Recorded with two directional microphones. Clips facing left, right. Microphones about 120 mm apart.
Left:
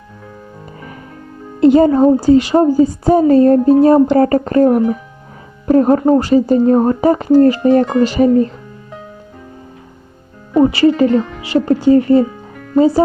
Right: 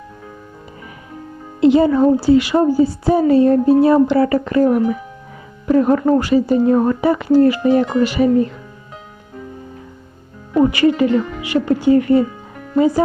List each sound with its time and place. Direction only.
1.6 s a woman's voice: 45° left (ahead or behind)
10.5 s a woman's voice: 25° left (ahead or behind)